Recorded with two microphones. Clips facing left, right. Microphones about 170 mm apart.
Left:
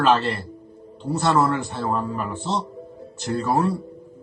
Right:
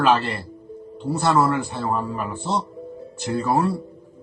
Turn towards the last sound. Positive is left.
turn(degrees=-10)  # may be behind; listen again after turning